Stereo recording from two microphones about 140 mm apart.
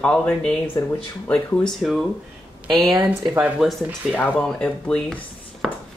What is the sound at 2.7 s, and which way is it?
Speech, 30° right (ahead or behind).